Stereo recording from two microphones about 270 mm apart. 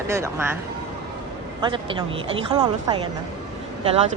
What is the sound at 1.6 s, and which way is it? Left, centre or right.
Speech, centre.